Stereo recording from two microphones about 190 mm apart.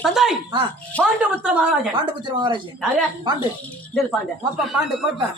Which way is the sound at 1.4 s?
5° right (ahead or behind).